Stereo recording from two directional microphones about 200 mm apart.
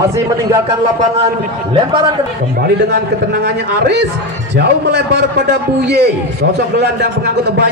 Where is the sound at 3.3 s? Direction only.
55° right (ahead or behind).